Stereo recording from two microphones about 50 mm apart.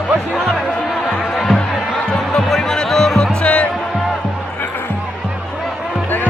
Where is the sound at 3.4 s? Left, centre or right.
Left.